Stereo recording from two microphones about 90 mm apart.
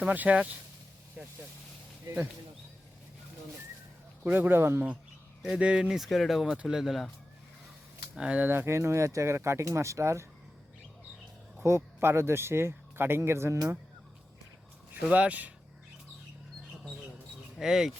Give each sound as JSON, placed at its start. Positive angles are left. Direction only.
{"t": 0.0, "sound": "speech", "side_deg": -15}
{"t": 4.2, "sound": "speech", "side_deg": -20}
{"t": 5.4, "sound": "speech", "side_deg": -10}
{"t": 8.1, "sound": "speech", "side_deg": -10}
{"t": 11.6, "sound": "speech", "side_deg": -30}
{"t": 15.1, "sound": "speech", "side_deg": -15}
{"t": 17.6, "sound": "speech", "side_deg": -5}